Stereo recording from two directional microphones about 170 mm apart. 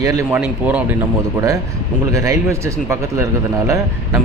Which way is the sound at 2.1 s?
20° right (ahead or behind).